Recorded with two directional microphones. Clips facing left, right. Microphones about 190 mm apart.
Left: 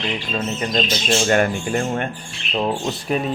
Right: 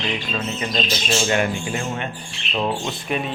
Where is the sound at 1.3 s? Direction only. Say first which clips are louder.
Left 3 dB; 45° left (ahead or behind).